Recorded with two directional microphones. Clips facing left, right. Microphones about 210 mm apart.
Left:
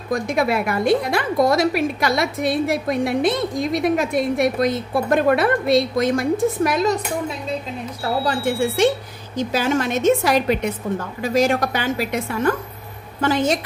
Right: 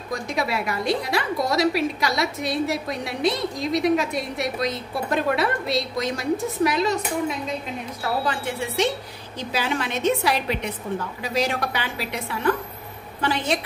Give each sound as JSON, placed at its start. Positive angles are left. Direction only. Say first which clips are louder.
{"t": 0.1, "sound": "a woman's voice", "louder": "left 6 dB", "side_deg": 55}
{"t": 8.3, "sound": "a woman's voice", "louder": "left 7 dB", "side_deg": 45}